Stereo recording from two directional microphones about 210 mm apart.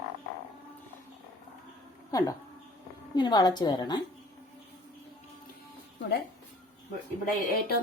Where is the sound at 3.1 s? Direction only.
20° left (ahead or behind).